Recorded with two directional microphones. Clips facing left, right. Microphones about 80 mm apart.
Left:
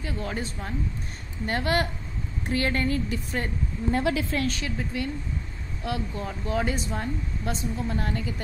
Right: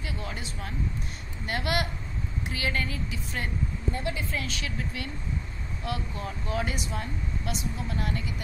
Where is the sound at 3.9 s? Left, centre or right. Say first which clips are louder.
Left 9 dB; left.